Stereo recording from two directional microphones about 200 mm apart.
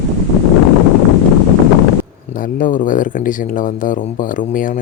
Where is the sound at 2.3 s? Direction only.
40° left (ahead or behind).